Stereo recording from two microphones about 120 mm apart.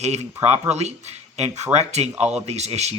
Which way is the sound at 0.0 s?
65° right (ahead or behind).